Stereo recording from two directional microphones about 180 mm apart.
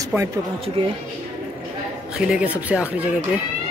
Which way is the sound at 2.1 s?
5° right (ahead or behind).